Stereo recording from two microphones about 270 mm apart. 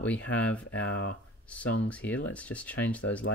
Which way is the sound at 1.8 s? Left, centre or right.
Centre.